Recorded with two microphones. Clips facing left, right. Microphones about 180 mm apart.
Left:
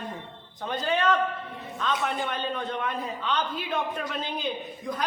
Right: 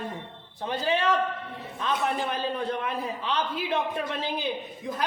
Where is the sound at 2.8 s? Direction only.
5° right (ahead or behind).